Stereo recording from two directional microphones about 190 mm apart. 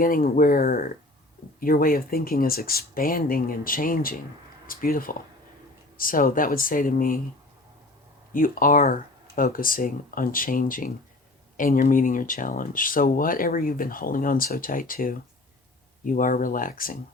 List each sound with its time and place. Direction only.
0.0 s speech: 45° left (ahead or behind)
8.3 s speech: 45° left (ahead or behind)